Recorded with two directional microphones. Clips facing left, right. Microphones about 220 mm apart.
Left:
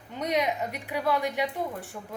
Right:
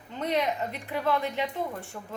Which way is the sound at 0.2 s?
15° left (ahead or behind).